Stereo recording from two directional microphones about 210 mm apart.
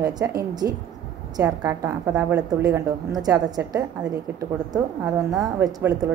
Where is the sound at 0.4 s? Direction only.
20° right (ahead or behind).